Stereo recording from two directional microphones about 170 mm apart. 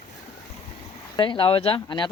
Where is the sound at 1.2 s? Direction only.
30° left (ahead or behind).